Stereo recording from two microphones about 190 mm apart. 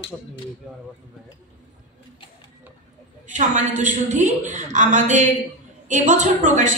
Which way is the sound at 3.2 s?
40° right (ahead or behind).